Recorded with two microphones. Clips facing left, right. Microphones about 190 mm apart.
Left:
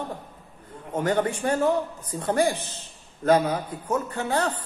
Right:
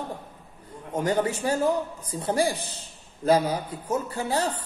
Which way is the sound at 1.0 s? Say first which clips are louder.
Left 1 dB; 10° right (ahead or behind).